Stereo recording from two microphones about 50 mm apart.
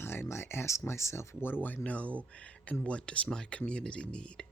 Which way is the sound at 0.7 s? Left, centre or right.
Left.